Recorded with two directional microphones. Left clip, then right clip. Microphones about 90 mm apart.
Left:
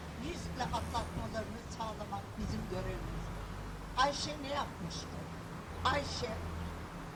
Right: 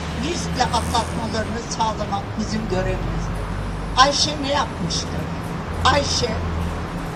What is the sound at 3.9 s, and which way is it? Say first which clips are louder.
Speech: right 17 dB; 45° right (ahead or behind).